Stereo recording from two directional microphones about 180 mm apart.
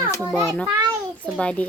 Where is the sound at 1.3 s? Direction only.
5° left (ahead or behind).